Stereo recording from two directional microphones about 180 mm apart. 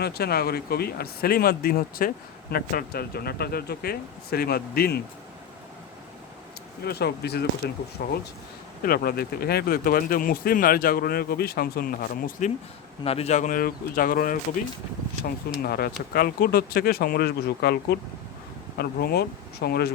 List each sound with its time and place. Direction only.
0.0 s speech: 60° left (ahead or behind)
6.8 s speech: 65° left (ahead or behind)
13.1 s speech: 35° left (ahead or behind); by 14.3 s 50° left (ahead or behind)
15.6 s speech: 60° left (ahead or behind)